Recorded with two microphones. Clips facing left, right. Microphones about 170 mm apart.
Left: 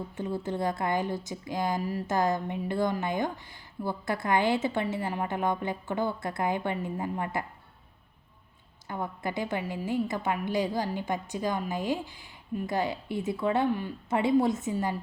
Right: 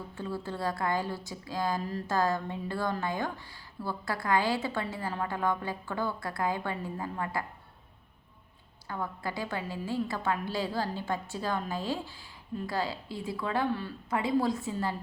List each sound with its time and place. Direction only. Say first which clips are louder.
0.1 s a woman's voice: left 3 dB; 20° left (ahead or behind)
8.9 s a woman's voice: left 2 dB; 20° left (ahead or behind)